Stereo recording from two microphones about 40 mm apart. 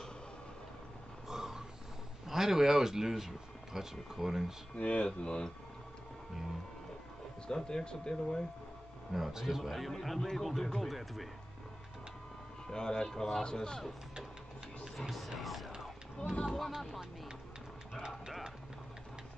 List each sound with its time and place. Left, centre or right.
1.3 s a sound: centre
2.2 s a man's voice: centre
4.7 s speech: left
5.2 s speech: left
7.4 s speech: centre
9.1 s speech: centre
9.6 s speech: centre
12.6 s speech: centre
15.0 s speech: centre